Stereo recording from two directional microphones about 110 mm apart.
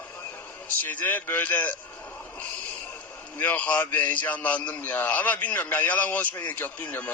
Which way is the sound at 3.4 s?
15° left (ahead or behind).